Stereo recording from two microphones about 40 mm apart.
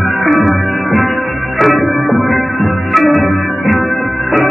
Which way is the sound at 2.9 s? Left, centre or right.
Centre.